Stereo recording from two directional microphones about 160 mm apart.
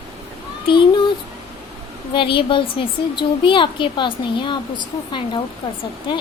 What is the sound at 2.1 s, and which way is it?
A woman's voice, 30° left (ahead or behind).